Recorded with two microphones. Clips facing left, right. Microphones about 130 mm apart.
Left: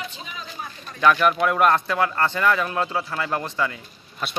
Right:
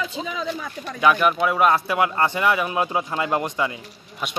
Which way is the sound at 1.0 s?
5° right (ahead or behind).